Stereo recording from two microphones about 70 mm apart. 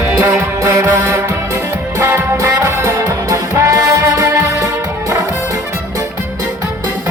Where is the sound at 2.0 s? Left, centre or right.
Right.